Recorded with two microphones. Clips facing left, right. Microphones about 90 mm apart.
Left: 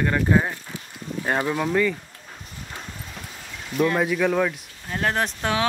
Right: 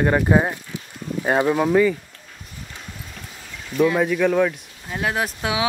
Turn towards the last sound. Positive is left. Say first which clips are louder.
# even
turn(degrees=-5)  # may be behind; listen again after turning